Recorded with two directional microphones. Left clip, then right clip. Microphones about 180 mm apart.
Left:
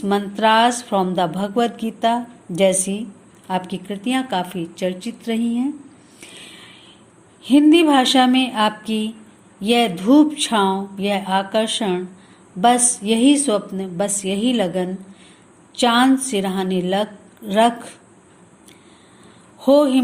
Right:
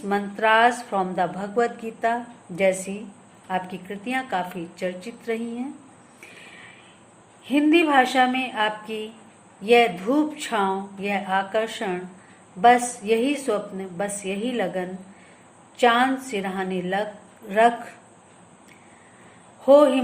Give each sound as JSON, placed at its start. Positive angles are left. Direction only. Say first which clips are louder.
{"t": 0.1, "sound": "speech", "louder": "left 4 dB", "side_deg": 45}
{"t": 3.5, "sound": "speech", "louder": "left 4 dB", "side_deg": 50}
{"t": 7.5, "sound": "a woman's voice", "louder": "left 5 dB", "side_deg": 50}
{"t": 19.6, "sound": "a woman's voice", "louder": "even", "side_deg": 55}